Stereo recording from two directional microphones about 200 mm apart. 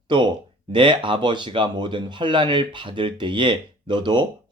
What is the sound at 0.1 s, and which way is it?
Speech, 25° right (ahead or behind).